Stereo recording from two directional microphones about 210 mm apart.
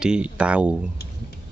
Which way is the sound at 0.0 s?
5° right (ahead or behind).